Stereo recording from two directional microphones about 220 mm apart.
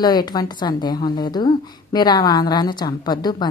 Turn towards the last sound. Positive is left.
turn(degrees=20)  # may be behind; listen again after turning